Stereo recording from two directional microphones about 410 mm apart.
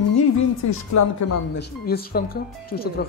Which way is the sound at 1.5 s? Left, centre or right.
Left.